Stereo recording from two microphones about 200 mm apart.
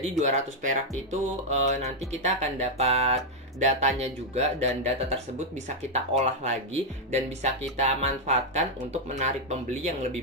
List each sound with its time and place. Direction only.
0.2 s speech: 40° right (ahead or behind)